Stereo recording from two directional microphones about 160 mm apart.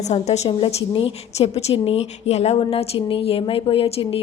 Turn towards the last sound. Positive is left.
turn(degrees=35)  # may be behind; listen again after turning